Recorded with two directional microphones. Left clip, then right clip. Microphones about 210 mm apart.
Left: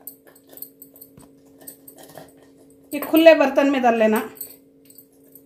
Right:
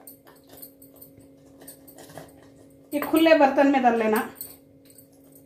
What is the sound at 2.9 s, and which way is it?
Speech, 55° left (ahead or behind).